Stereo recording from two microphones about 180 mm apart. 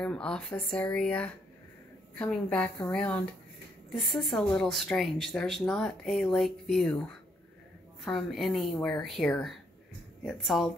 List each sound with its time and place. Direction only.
0.0 s a woman's voice: 5° left (ahead or behind)